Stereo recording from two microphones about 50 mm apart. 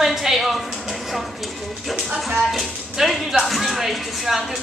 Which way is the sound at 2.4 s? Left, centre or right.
Centre.